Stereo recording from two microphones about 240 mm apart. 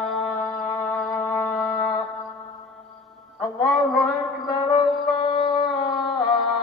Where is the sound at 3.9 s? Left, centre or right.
Centre.